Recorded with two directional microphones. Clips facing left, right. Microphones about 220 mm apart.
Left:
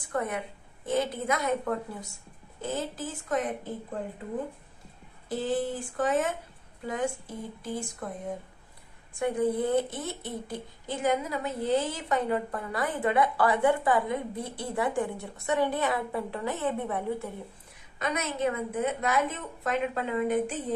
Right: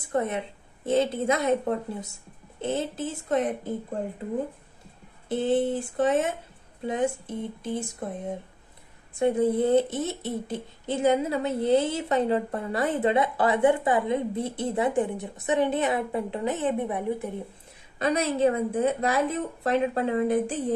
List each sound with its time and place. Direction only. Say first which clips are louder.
0.1 s speech: right 4 dB; 25° right (ahead or behind)
5.3 s speech: right 5 dB; 25° right (ahead or behind)
17.9 s a woman's voice: right 7 dB; 30° right (ahead or behind)